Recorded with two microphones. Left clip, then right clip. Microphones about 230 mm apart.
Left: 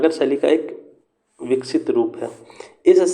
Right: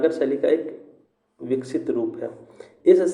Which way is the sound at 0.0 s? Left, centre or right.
Left.